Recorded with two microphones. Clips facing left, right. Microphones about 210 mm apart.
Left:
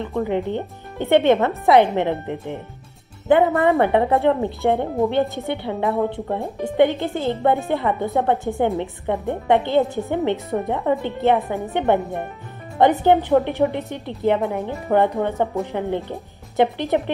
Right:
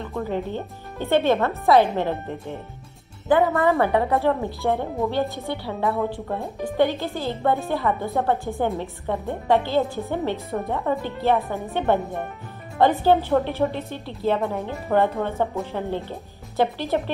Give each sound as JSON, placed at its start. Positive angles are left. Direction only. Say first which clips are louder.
{"t": 0.0, "sound": "a woman's voice", "louder": "left 5 dB", "side_deg": 20}
{"t": 3.3, "sound": "a woman's voice", "louder": "left 3 dB", "side_deg": 25}